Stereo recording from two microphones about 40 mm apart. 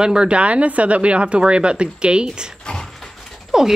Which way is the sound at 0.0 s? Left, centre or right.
Right.